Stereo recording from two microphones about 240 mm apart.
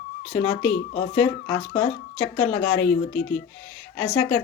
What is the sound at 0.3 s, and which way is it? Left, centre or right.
Speech, left.